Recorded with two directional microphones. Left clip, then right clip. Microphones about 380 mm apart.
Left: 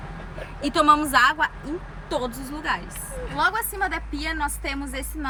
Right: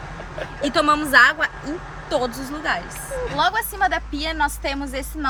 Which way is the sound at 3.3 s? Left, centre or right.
Centre.